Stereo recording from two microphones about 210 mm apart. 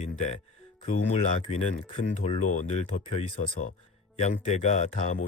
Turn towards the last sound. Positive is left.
turn(degrees=40)  # may be behind; listen again after turning